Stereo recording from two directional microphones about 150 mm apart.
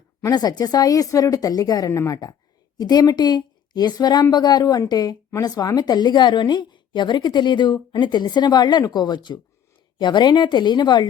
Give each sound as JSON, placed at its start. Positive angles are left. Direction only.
{"t": 0.3, "sound": "a woman's voice", "side_deg": 25}